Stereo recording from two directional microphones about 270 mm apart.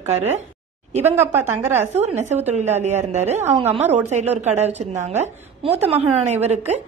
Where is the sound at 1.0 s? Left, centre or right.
Centre.